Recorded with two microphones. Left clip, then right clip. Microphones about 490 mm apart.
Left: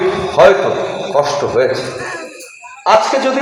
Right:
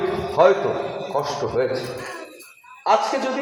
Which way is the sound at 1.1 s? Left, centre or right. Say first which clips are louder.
Left 10 dB; centre.